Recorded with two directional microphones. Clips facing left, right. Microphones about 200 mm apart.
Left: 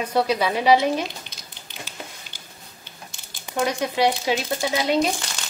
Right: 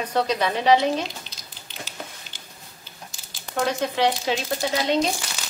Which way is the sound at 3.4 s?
10° left (ahead or behind).